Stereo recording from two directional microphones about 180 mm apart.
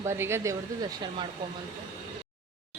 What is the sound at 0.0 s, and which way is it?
A woman's voice, 15° right (ahead or behind).